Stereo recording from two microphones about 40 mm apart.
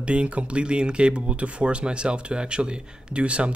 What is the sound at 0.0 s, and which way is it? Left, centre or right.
Speech, right.